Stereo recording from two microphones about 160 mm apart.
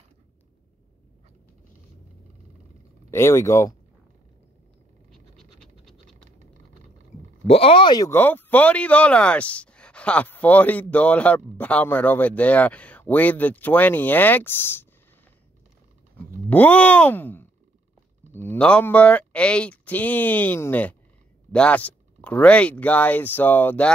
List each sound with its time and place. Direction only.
3.1 s speech: 15° left (ahead or behind)
5.1 s scratch: centre (ahead or behind)
7.4 s speech: 35° left (ahead or behind)
8.1 s speech: 10° left (ahead or behind)
16.4 s speech: 10° left (ahead or behind)